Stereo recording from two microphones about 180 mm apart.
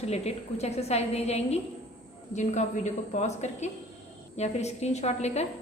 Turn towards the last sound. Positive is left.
turn(degrees=40)  # may be behind; listen again after turning